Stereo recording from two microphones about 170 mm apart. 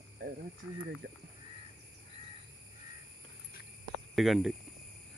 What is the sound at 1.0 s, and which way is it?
Speech, 70° right (ahead or behind).